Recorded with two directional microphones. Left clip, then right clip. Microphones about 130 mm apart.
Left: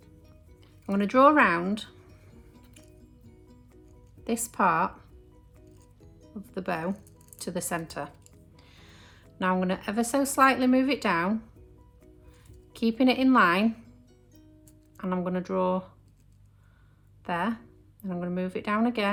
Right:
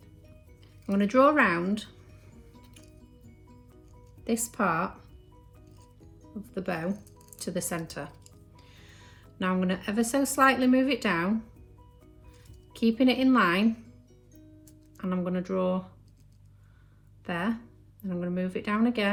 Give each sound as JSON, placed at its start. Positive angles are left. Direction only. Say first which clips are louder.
{"t": 0.9, "sound": "speech", "louder": "left 2 dB", "side_deg": 25}
{"t": 4.2, "sound": "speech", "louder": "left 3 dB", "side_deg": 25}
{"t": 6.3, "sound": "speech", "louder": "left 1 dB", "side_deg": 25}
{"t": 12.7, "sound": "speech", "louder": "even", "side_deg": 25}
{"t": 14.9, "sound": "speech", "louder": "left 2 dB", "side_deg": 30}
{"t": 17.2, "sound": "speech", "louder": "left 2 dB", "side_deg": 25}